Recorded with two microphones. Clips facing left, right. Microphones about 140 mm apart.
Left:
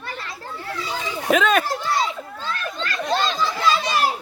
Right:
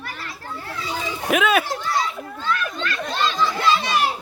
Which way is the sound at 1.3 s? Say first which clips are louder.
Left 1 dB; 10° right (ahead or behind).